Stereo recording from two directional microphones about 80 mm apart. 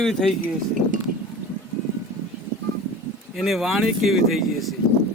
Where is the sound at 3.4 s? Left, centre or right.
Centre.